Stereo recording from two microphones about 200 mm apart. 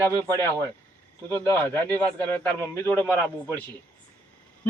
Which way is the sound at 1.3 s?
10° left (ahead or behind).